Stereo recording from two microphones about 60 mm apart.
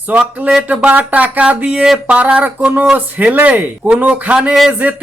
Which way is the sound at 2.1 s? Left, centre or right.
Right.